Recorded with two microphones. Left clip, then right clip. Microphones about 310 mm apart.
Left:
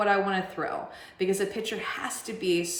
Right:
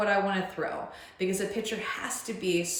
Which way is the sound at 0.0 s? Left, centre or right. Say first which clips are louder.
Left 2 dB; centre.